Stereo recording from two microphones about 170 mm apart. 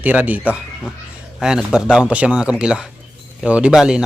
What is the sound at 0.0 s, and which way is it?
Speech, 10° right (ahead or behind).